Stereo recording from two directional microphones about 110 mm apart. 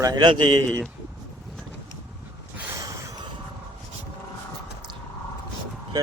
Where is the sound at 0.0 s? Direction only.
40° right (ahead or behind).